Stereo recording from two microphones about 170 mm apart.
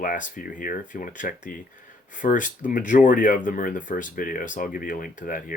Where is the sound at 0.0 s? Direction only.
50° left (ahead or behind).